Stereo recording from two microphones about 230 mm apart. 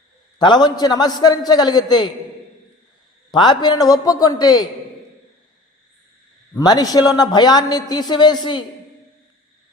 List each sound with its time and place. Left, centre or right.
0.3 s a man's voice: centre
3.3 s a man's voice: centre
6.6 s a man's voice: centre